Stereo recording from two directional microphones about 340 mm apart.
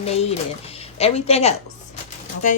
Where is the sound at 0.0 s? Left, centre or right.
Centre.